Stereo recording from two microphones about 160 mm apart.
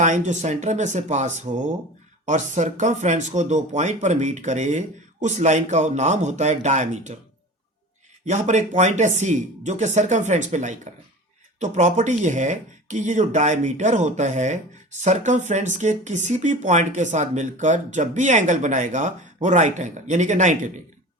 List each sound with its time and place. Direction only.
0.0 s speech: 50° right (ahead or behind)
8.2 s speech: 50° right (ahead or behind)